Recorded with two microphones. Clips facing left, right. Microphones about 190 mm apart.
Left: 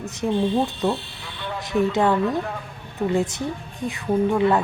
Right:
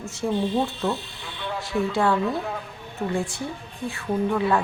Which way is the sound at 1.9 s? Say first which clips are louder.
Even; 20° left (ahead or behind).